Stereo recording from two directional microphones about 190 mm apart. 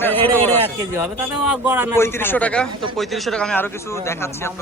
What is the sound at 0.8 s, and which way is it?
Speech, 10° right (ahead or behind).